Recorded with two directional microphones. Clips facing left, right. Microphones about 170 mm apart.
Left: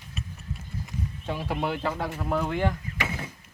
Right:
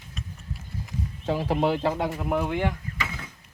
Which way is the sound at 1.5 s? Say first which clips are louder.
Right 5 dB; 35° right (ahead or behind).